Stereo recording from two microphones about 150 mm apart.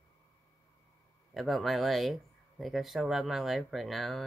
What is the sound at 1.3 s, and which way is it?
Speech, centre (ahead or behind).